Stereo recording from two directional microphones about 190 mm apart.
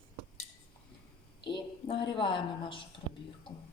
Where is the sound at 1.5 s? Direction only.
25° left (ahead or behind).